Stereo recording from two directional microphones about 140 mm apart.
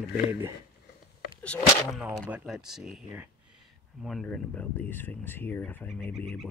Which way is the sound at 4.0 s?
Centre (ahead or behind).